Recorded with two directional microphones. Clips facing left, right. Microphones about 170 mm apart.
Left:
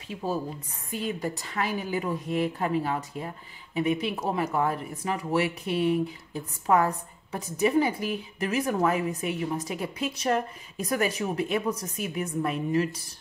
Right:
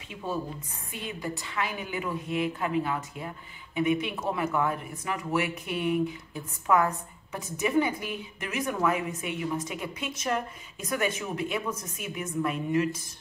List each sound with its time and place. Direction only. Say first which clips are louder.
0.1 s a woman's voice: left 3 dB; 35° left (ahead or behind)